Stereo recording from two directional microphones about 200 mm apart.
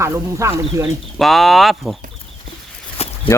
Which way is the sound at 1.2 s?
Centre (ahead or behind).